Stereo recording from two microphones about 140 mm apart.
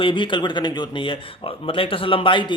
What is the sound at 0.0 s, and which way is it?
A man's voice, 35° left (ahead or behind).